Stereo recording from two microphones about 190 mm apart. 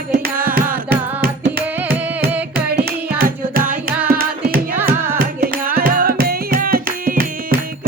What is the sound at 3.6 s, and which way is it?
Music, 10° right (ahead or behind).